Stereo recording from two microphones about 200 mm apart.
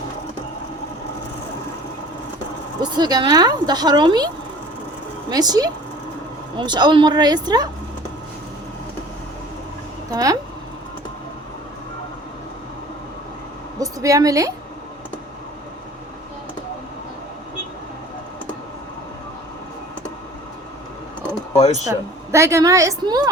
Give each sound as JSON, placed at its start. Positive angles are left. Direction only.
{"t": 2.8, "sound": "a woman's voice", "side_deg": -20}
{"t": 5.3, "sound": "a woman's voice", "side_deg": -20}
{"t": 10.1, "sound": "a woman's voice", "side_deg": -20}
{"t": 13.7, "sound": "a woman's voice", "side_deg": -15}
{"t": 21.8, "sound": "a woman's voice", "side_deg": -15}